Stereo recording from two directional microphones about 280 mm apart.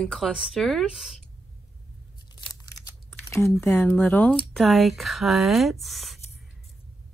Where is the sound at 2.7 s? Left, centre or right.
Centre.